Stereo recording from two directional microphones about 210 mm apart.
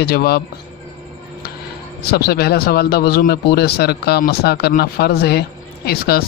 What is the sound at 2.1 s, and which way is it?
Speech, 50° left (ahead or behind).